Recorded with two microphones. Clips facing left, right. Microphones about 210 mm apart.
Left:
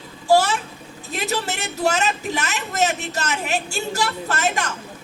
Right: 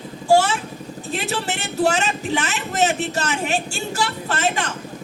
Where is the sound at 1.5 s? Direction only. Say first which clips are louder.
Right 2 dB; 35° right (ahead or behind).